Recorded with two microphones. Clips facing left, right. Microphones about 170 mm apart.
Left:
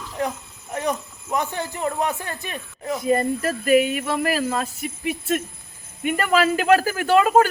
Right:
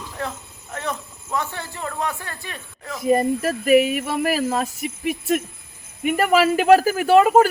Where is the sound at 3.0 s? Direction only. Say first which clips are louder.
Right 3 dB; 10° right (ahead or behind).